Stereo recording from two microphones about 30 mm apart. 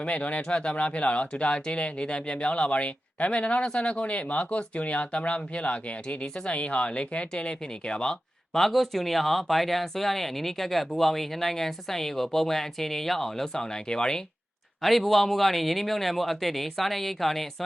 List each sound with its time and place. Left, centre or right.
0.0 s speech: left
0.4 s speech: left
1.4 s speech: left
8.5 s speech: centre
13.8 s speech: left
14.8 s speech: centre